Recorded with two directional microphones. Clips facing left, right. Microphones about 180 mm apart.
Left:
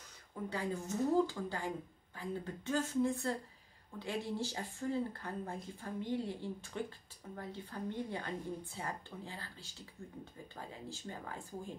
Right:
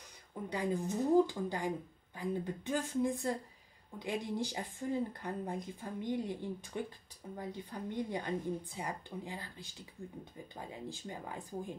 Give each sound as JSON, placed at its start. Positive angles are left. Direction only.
{"t": 0.3, "sound": "speech", "side_deg": -15}